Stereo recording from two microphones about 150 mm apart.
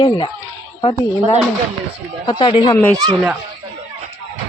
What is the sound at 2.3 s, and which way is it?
Speech, 30° left (ahead or behind).